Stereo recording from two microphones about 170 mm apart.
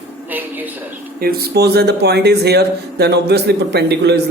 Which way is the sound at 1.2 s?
65° right (ahead or behind).